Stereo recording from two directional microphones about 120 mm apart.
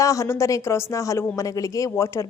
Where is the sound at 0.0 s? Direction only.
25° left (ahead or behind).